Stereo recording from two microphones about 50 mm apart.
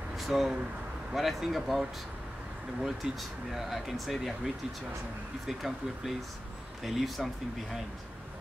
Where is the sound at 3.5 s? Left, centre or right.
Centre.